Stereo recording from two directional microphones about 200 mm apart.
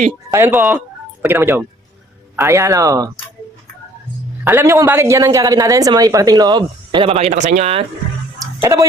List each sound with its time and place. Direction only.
0.3 s a woman's voice: 10° right (ahead or behind)
4.4 s a woman's voice: 10° right (ahead or behind); by 7.9 s 30° right (ahead or behind)
8.6 s a woman's voice: 15° right (ahead or behind)